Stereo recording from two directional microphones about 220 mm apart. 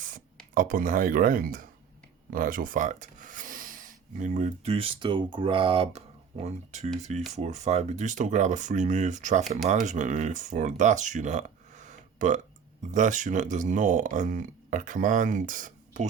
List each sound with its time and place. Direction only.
0.5 s speech: 40° right (ahead or behind)